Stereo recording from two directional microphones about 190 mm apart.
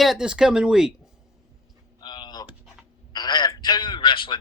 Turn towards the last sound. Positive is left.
turn(degrees=25)  # may be behind; listen again after turning